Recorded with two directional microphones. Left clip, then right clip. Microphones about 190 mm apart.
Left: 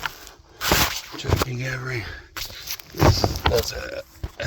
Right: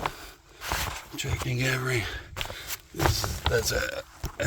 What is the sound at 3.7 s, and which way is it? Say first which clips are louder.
Speech: right 3 dB; 60° right (ahead or behind).